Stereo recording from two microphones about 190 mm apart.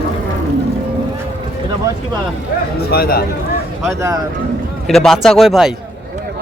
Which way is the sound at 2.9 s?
55° left (ahead or behind).